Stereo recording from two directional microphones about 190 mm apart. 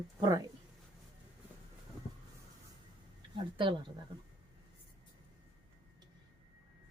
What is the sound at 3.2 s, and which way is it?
Speech, 25° right (ahead or behind).